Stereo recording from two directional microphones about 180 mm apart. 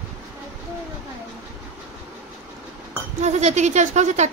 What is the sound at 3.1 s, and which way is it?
Speech, 40° right (ahead or behind).